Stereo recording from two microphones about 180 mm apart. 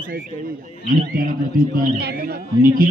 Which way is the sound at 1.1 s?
50° right (ahead or behind).